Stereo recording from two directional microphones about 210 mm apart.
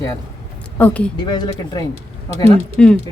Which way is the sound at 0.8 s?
5° left (ahead or behind).